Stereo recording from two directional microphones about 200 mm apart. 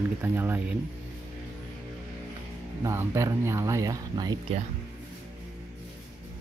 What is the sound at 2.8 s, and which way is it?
Speech, 15° right (ahead or behind).